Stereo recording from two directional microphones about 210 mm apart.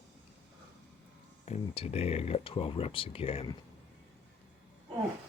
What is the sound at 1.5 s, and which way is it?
Speech, 30° left (ahead or behind).